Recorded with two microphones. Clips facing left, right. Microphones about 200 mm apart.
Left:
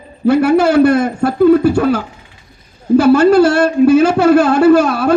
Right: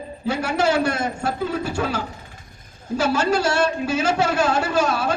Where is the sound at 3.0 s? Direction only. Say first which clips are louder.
Left 11 dB; 60° left (ahead or behind).